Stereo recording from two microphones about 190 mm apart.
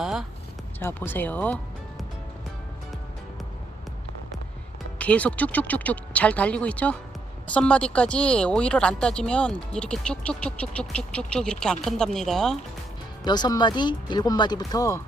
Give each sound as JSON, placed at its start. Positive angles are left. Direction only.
{"t": 0.0, "sound": "speech", "side_deg": 0}
{"t": 0.8, "sound": "speech", "side_deg": 10}
{"t": 4.9, "sound": "speech", "side_deg": 5}
{"t": 13.2, "sound": "speech", "side_deg": 20}